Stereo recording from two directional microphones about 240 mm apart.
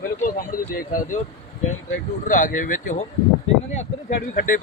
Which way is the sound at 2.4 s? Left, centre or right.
Left.